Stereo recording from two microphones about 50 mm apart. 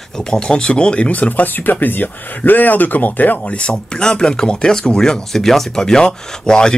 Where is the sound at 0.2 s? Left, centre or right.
Centre.